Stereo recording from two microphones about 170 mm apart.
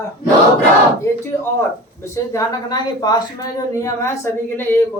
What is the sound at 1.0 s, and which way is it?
A woman's voice, 15° left (ahead or behind).